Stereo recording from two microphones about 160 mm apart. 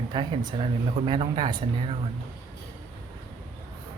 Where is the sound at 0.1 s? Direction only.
30° right (ahead or behind).